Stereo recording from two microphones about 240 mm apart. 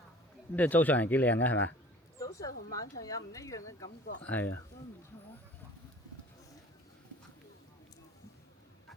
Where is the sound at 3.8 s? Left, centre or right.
Left.